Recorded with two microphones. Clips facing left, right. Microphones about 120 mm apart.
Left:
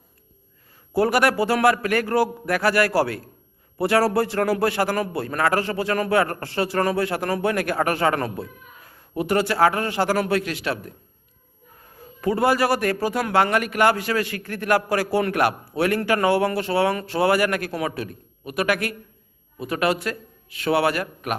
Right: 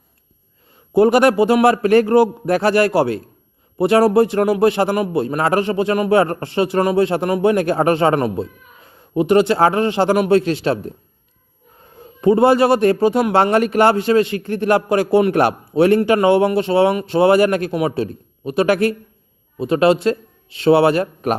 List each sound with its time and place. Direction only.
0.9 s a man's voice: 20° right (ahead or behind)
11.9 s a man's voice: 25° right (ahead or behind)